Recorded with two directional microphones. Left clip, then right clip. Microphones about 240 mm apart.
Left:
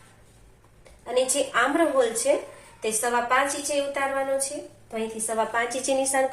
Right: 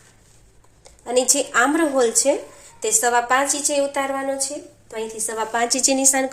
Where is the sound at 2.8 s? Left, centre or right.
Right.